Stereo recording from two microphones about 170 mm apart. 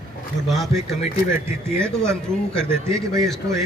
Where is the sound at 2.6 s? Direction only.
15° right (ahead or behind).